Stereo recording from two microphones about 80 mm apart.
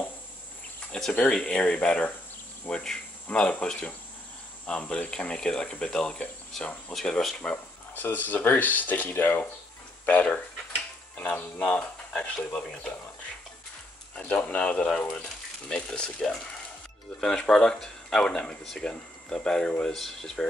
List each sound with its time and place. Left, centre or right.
0.9 s speech: centre
7.5 s speech: left
11.1 s speech: left
14.1 s speech: centre